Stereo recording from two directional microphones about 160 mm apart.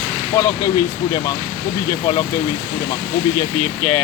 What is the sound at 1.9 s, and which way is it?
Speech, 20° left (ahead or behind).